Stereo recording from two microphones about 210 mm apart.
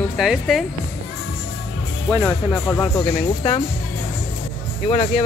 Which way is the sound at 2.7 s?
20° left (ahead or behind).